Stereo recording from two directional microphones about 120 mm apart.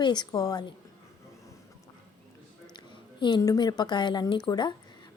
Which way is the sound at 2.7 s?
40° left (ahead or behind).